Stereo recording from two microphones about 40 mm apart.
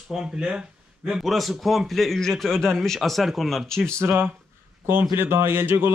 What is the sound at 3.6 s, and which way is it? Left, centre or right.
Speech, centre.